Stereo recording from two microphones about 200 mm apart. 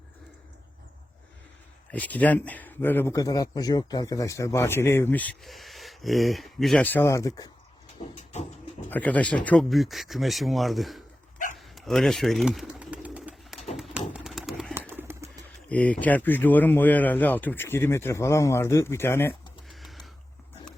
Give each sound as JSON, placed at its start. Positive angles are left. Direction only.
{"t": 1.9, "sound": "speech", "side_deg": 10}
{"t": 8.1, "sound": "vehicle", "side_deg": 35}
{"t": 8.9, "sound": "speech", "side_deg": 10}
{"t": 11.5, "sound": "bird", "side_deg": 0}
{"t": 14.1, "sound": "a sound", "side_deg": 0}
{"t": 14.8, "sound": "bird", "side_deg": -10}
{"t": 15.7, "sound": "speech", "side_deg": 5}
{"t": 19.6, "sound": "a sound", "side_deg": 0}